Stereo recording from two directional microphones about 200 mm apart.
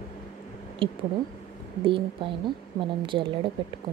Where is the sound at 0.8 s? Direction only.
25° right (ahead or behind).